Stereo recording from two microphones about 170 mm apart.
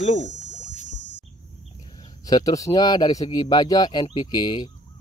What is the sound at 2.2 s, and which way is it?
A man's voice, 20° left (ahead or behind).